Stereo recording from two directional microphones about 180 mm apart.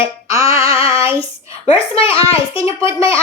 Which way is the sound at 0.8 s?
30° left (ahead or behind).